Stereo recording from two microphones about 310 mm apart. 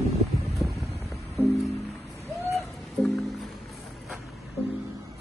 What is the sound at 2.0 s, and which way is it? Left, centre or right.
Music, centre.